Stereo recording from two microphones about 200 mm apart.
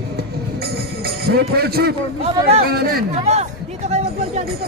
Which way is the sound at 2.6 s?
50° right (ahead or behind).